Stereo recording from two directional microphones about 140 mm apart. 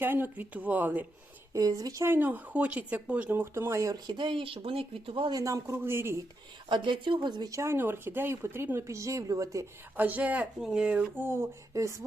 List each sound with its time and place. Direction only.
0.0 s speech: 15° right (ahead or behind)
1.5 s speech: 25° right (ahead or behind)
5.4 s speech: 20° right (ahead or behind)
6.7 s speech: 35° right (ahead or behind)
10.0 s speech: 10° right (ahead or behind)